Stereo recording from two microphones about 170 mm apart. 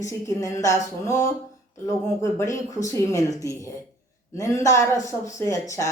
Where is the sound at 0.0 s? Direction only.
20° left (ahead or behind).